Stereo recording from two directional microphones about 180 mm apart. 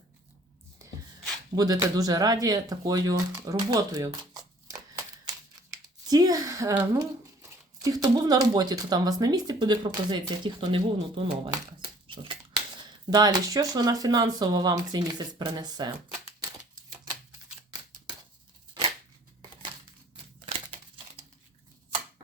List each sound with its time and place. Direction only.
0.8 s rub: 15° right (ahead or behind)
1.5 s speech: 20° right (ahead or behind)
6.1 s speech: 20° right (ahead or behind)
20.4 s crumpling: 30° right (ahead or behind)